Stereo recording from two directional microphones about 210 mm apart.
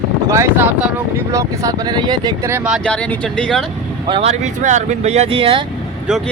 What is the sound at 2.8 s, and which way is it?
Speech, 5° left (ahead or behind).